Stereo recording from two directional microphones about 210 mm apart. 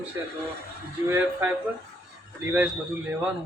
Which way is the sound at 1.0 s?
10° right (ahead or behind).